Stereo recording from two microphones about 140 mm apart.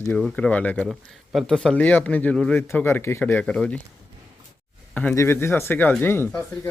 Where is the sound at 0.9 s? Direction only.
Centre (ahead or behind).